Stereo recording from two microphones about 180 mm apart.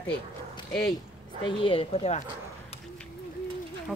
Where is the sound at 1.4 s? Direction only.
30° left (ahead or behind).